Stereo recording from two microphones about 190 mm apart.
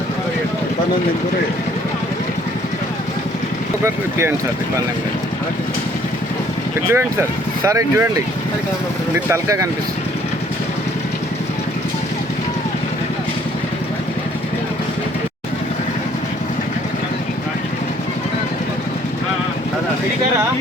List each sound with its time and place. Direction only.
3.8 s speech: 15° right (ahead or behind)
6.9 s speech: 15° right (ahead or behind)
9.1 s speech: 15° right (ahead or behind)